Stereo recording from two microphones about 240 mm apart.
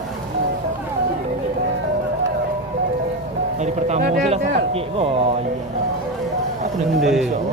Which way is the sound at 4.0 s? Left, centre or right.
Right.